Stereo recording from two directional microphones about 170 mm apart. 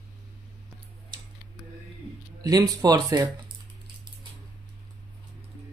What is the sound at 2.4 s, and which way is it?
Speech, 20° right (ahead or behind).